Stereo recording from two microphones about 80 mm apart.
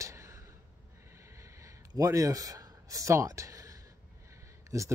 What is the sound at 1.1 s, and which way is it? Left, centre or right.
Snort, right.